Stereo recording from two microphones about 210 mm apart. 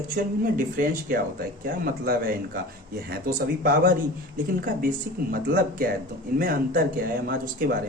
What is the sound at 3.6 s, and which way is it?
Speech, 40° right (ahead or behind).